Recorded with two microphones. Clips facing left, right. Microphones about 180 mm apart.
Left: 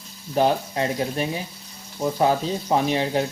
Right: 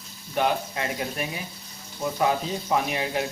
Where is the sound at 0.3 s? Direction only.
30° left (ahead or behind).